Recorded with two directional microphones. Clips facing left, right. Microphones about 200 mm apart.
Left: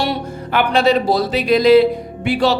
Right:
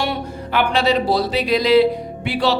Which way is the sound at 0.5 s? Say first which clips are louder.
Left 3 dB; 45° left (ahead or behind).